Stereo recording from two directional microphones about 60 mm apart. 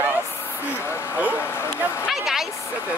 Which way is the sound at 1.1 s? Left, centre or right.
Right.